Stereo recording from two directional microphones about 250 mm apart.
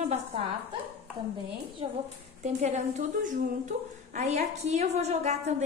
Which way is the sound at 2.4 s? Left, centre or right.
Right.